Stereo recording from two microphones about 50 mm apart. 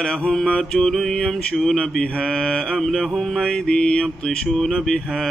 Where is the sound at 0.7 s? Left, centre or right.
Centre.